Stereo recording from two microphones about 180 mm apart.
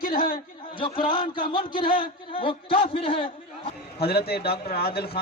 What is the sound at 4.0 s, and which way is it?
Speech, 60° left (ahead or behind).